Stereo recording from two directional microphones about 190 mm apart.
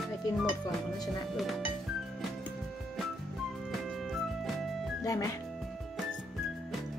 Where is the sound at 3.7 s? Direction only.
Centre (ahead or behind).